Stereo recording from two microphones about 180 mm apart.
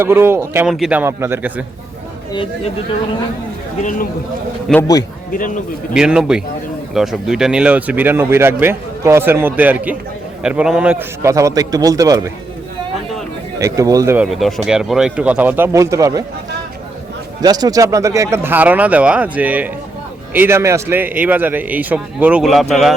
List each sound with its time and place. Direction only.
0.0 s speech: 15° right (ahead or behind)
2.3 s speech: 30° left (ahead or behind)
4.7 s a man's voice: centre (ahead or behind)
5.9 s a man's voice: 5° right (ahead or behind)
11.2 s a man's voice: 15° right (ahead or behind)
13.6 s speech: 20° right (ahead or behind)
14.3 s speech: centre (ahead or behind); by 16.2 s 20° right (ahead or behind)
17.4 s a man's voice: 20° right (ahead or behind); by 23.0 s centre (ahead or behind)